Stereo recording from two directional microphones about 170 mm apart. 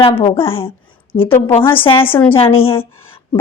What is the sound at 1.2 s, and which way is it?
Speech, 15° left (ahead or behind).